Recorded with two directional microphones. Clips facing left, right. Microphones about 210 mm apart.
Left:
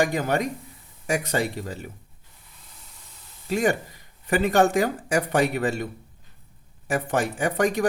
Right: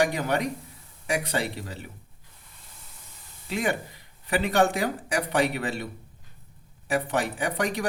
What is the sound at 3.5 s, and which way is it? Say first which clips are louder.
A man's voice: left 5 dB; 45° left (ahead or behind).